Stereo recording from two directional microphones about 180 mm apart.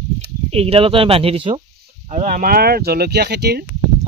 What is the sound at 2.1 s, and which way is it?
Speech, 40° right (ahead or behind).